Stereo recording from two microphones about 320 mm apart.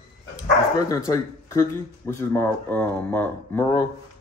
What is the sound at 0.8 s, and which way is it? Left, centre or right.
Speech, centre.